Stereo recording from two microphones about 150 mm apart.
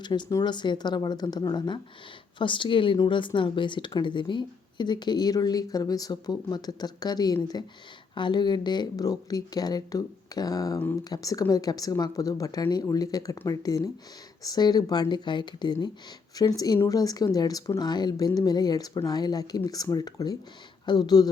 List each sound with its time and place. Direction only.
0.0 s a woman's voice: 30° left (ahead or behind)